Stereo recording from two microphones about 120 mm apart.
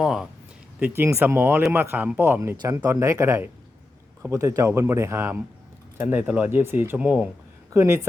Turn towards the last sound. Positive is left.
turn(degrees=-30)  # may be behind; listen again after turning